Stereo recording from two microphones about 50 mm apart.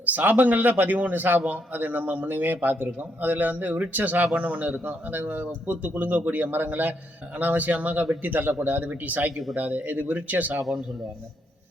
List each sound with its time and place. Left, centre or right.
0.0 s a man's voice: right